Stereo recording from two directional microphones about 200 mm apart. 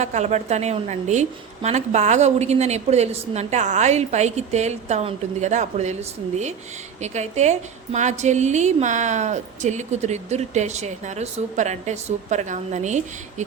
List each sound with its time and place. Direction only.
0.0 s a woman's voice: 35° right (ahead or behind)